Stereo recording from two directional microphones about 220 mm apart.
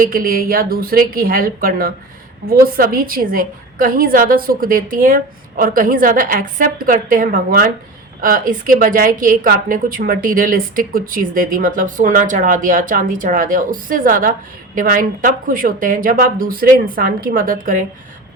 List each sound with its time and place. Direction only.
0.0 s a woman's voice: 40° right (ahead or behind)